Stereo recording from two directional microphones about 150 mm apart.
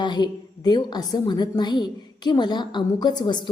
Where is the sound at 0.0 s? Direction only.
30° left (ahead or behind).